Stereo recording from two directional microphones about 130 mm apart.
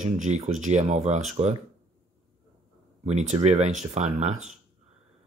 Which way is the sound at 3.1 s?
60° right (ahead or behind).